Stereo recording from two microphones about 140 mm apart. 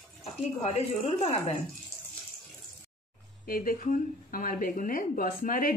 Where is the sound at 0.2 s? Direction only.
50° left (ahead or behind).